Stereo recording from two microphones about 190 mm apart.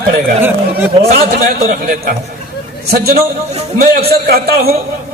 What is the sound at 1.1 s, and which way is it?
A man's voice, 50° right (ahead or behind).